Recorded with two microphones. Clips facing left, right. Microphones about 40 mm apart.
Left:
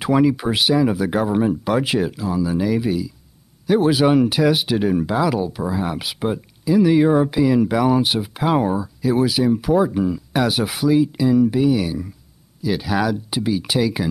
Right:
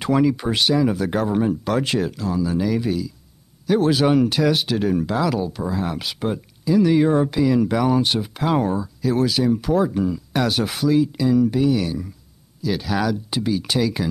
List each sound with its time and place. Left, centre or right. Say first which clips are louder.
0.0 s speech: left 2 dB; centre